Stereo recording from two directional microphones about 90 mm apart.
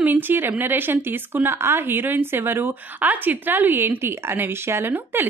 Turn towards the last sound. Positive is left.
turn(degrees=-25)  # may be behind; listen again after turning